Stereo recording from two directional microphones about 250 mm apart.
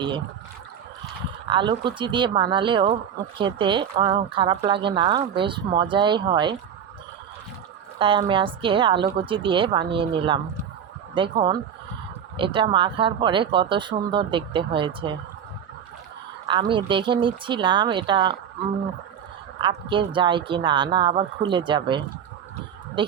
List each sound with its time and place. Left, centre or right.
1.5 s speech: centre
7.9 s speech: right
16.5 s speech: centre
19.6 s speech: centre